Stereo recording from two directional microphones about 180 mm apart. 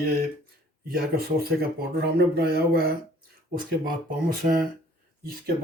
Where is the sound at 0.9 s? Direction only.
60° right (ahead or behind).